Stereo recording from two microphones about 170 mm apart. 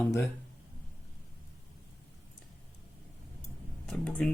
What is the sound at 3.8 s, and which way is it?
Speech, 5° left (ahead or behind).